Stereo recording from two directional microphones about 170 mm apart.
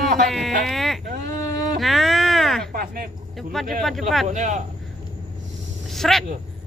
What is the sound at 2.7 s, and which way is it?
Speech, 55° right (ahead or behind).